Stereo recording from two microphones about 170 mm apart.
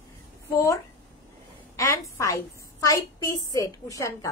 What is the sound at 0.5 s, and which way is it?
A woman's voice, 20° left (ahead or behind).